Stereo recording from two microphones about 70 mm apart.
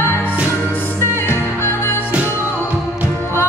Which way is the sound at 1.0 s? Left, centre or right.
Left.